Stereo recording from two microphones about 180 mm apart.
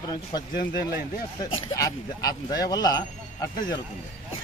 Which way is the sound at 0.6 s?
60° left (ahead or behind).